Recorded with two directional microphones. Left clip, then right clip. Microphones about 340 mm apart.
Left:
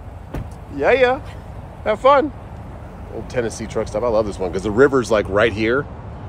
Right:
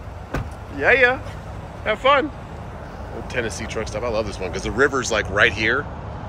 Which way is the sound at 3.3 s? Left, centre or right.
Centre.